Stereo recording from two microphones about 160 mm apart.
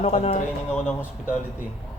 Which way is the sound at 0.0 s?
45° left (ahead or behind).